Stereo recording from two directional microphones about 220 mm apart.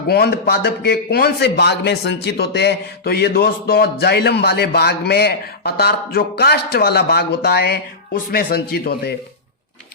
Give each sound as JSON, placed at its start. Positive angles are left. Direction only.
{"t": 0.1, "sound": "a man's voice", "side_deg": 45}